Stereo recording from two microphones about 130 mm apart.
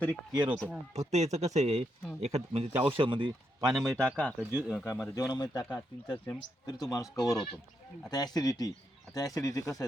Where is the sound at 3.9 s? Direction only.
10° left (ahead or behind).